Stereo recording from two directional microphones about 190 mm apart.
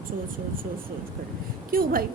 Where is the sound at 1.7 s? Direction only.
50° right (ahead or behind).